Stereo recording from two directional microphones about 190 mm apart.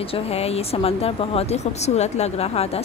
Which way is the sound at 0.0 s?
30° left (ahead or behind).